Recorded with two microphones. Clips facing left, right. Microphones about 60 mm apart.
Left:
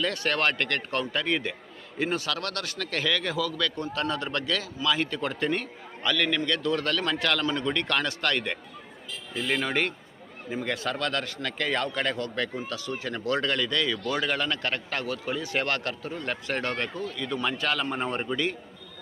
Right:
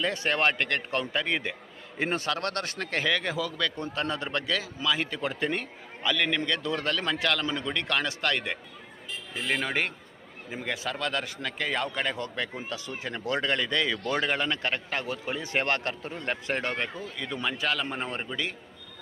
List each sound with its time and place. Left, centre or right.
0.0 s speech: centre
2.0 s a man's voice: right
17.4 s a man's voice: centre